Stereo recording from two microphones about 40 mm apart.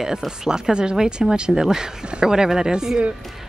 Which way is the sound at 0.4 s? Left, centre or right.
Centre.